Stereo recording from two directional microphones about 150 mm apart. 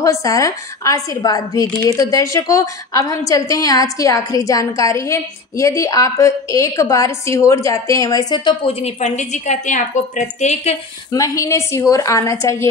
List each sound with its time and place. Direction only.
0.0 s a woman's voice: 20° left (ahead or behind); by 10.8 s 45° left (ahead or behind)
11.1 s a woman's voice: 20° left (ahead or behind)